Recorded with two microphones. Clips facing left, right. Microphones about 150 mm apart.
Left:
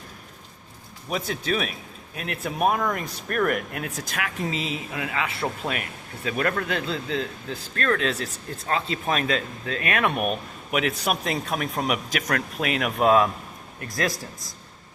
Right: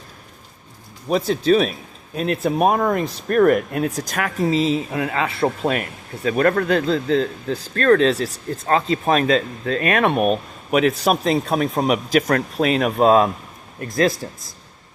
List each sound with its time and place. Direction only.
1.1 s speech: 30° right (ahead or behind)